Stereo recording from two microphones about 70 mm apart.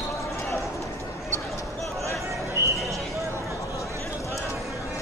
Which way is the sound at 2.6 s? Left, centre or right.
Right.